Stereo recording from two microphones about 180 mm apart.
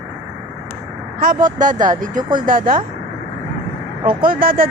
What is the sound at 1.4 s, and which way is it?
Speech, 45° right (ahead or behind).